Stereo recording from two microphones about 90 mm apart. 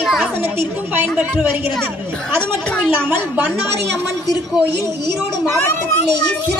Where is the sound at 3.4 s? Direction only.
30° right (ahead or behind).